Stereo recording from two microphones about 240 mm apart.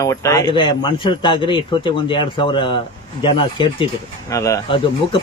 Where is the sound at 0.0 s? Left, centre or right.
Centre.